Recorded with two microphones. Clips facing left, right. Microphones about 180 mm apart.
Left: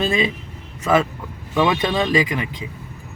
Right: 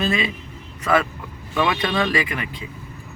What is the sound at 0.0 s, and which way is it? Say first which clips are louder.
Speech: left 3 dB; 25° left (ahead or behind).